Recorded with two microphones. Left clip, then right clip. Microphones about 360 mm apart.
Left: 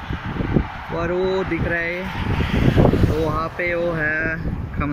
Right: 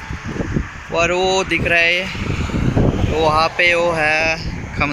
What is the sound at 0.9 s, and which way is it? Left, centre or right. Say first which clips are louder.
Speech: right 6 dB; right.